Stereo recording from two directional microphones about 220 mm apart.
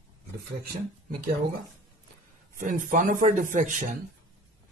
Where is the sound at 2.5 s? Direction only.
40° right (ahead or behind).